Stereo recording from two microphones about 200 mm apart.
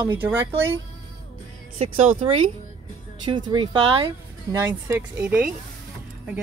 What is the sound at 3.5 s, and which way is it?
Speech, 25° right (ahead or behind).